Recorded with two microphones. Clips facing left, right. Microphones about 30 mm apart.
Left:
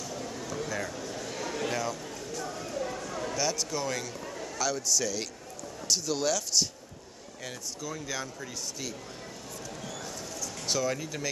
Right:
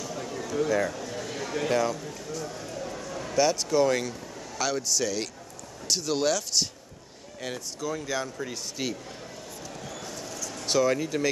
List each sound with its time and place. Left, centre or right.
0.0 s a sound: centre
1.6 s speech: centre
3.3 s speech: centre
8.8 s speech: right
10.7 s speech: centre